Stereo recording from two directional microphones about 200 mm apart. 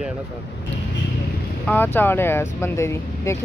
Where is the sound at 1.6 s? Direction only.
10° left (ahead or behind).